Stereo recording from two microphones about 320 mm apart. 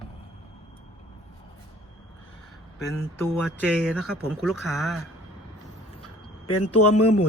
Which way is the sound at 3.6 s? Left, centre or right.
Centre.